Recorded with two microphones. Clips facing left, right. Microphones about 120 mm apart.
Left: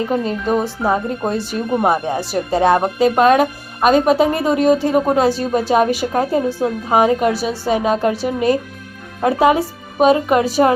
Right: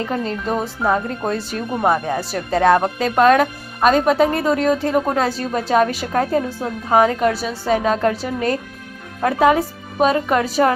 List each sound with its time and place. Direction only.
0.0 s speech: 15° left (ahead or behind)